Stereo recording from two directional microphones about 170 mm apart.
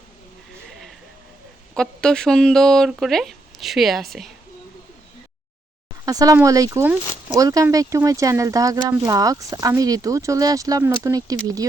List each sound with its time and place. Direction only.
1.7 s speech: 5° left (ahead or behind)
6.1 s speech: 20° right (ahead or behind)